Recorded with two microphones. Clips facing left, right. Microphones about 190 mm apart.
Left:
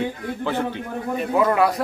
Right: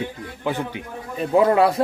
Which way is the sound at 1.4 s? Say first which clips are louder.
Right 2 dB; 25° right (ahead or behind).